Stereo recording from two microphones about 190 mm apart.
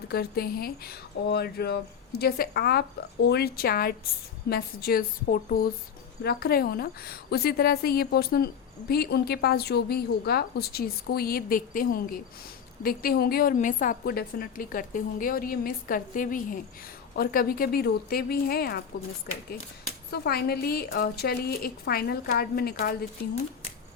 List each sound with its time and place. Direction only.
0.1 s a woman's voice: 55° left (ahead or behind)
20.1 s speech: 55° left (ahead or behind)